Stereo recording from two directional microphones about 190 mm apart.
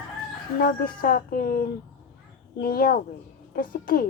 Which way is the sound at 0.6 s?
50° left (ahead or behind).